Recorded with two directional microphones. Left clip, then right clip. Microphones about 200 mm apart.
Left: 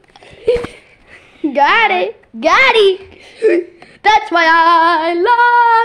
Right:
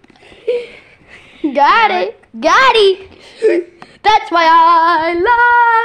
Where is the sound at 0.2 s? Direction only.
45° left (ahead or behind).